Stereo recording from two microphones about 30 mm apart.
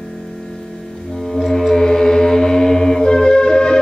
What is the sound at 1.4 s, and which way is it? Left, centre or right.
Mantra, centre.